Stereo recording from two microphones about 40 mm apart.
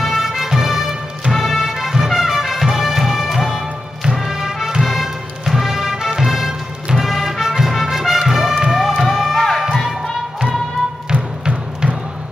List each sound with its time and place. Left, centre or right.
0.0 s music: centre
9.6 s crowd: centre
11.1 s music: right